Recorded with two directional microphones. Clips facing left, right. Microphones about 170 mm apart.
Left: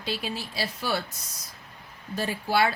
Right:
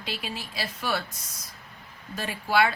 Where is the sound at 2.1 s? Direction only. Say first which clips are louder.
Even; 35° left (ahead or behind).